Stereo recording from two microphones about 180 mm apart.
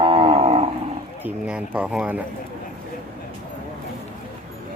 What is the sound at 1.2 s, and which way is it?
Bird, 5° right (ahead or behind).